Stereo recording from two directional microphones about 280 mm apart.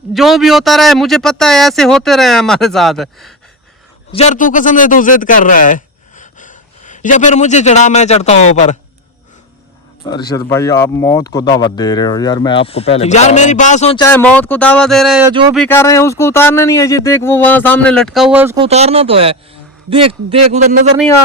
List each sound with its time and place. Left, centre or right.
0.1 s speech: centre
4.1 s speech: left
10.0 s speech: centre
15.3 s speech: centre
15.5 s speech: centre
18.6 s speech: right